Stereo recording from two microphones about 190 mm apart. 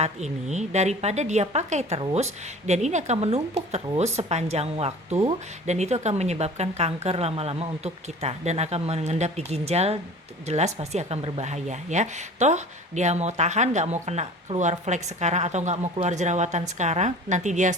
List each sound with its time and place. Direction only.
0.0 s speech: 35° right (ahead or behind)